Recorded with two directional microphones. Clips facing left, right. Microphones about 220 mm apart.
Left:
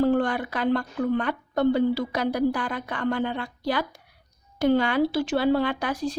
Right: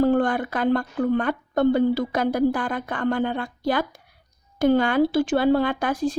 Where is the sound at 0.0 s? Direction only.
50° right (ahead or behind).